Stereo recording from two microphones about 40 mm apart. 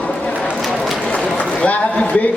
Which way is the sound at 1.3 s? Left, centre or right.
Left.